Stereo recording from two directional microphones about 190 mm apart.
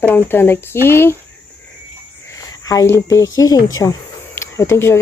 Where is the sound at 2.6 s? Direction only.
20° left (ahead or behind).